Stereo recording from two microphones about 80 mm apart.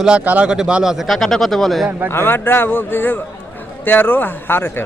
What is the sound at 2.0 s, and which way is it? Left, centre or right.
A man's voice, left.